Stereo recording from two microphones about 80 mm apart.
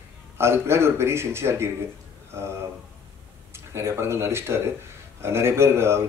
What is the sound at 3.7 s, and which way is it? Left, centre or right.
Speech, right.